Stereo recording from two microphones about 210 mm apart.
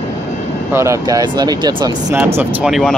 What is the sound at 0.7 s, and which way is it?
Speech, 15° right (ahead or behind).